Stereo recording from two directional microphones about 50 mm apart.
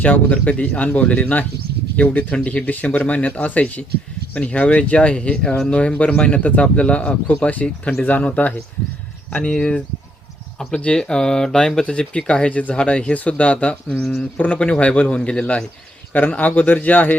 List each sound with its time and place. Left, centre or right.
0.0 s speech: left
2.9 s speech: left
9.6 s speech: left
11.9 s speech: left
16.1 s speech: left